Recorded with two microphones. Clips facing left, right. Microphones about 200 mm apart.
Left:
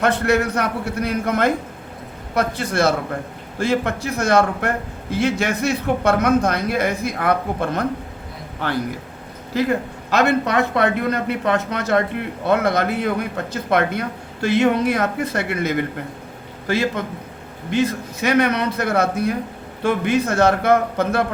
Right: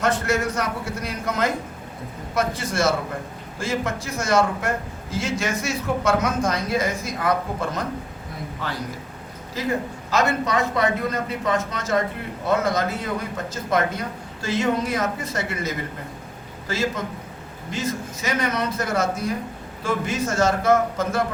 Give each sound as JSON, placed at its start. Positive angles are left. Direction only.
{"t": 0.0, "sound": "a man's voice", "side_deg": 60}